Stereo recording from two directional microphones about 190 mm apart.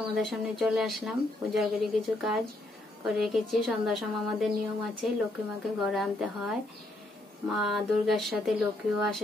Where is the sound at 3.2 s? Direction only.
Centre (ahead or behind).